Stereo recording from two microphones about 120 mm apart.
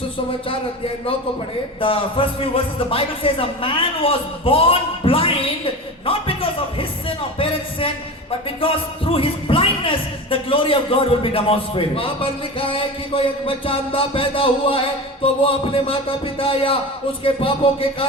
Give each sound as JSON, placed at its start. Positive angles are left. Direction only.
{"t": 1.8, "sound": "a man's voice", "side_deg": 50}